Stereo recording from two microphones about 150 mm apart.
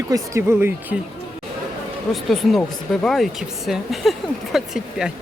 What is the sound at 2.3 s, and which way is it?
Speech, 5° left (ahead or behind).